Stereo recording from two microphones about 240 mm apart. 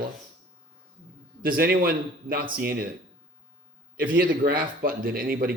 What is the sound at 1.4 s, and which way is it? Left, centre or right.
A man's voice, right.